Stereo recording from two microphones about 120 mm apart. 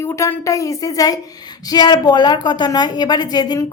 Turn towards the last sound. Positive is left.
turn(degrees=35)  # may be behind; listen again after turning